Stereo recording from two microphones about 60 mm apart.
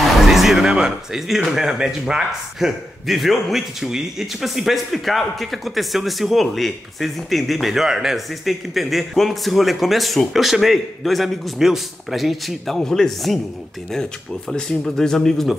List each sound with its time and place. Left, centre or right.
0.0 s a man's voice: centre
14.7 s speech: centre